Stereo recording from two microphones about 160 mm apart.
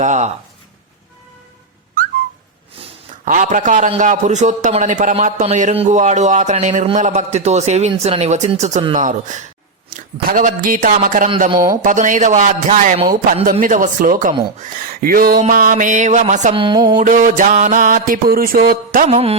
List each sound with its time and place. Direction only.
0.0 s a man's voice: 50° right (ahead or behind)
3.2 s a man's voice: 55° right (ahead or behind)
10.2 s music: 60° right (ahead or behind)
11.8 s a man's voice: 55° right (ahead or behind)
13.3 s music: 55° right (ahead or behind)
15.4 s a man's voice: 55° right (ahead or behind)
16.6 s music: 30° right (ahead or behind)
17.0 s music: 55° right (ahead or behind)
19.0 s music: 40° right (ahead or behind)